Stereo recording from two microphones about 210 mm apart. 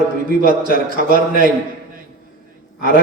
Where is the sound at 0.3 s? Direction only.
40° right (ahead or behind).